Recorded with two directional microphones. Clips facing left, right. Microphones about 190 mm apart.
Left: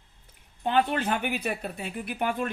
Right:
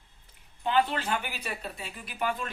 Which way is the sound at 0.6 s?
50° left (ahead or behind).